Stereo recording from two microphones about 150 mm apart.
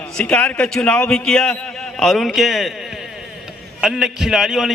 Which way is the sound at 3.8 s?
5° right (ahead or behind).